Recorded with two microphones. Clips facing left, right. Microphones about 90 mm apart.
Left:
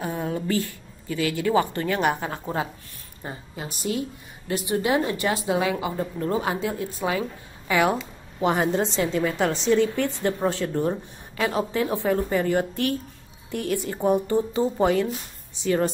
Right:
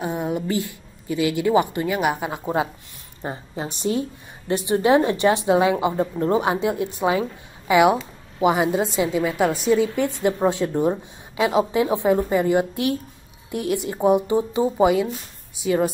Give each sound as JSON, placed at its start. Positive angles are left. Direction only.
{"t": 0.0, "sound": "a woman's voice", "side_deg": -20}
{"t": 3.2, "sound": "a woman's voice", "side_deg": -30}